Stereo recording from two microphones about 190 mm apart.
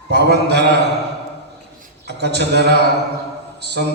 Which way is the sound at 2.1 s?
60° right (ahead or behind).